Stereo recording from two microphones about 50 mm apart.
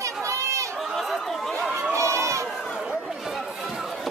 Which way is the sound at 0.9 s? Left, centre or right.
Centre.